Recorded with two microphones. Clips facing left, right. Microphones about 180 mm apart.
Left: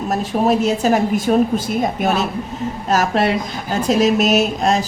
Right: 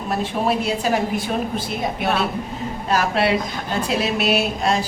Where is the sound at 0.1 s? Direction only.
45° left (ahead or behind).